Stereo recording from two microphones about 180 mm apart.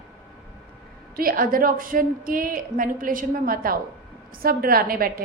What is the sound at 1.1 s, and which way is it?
A woman's voice, 55° right (ahead or behind).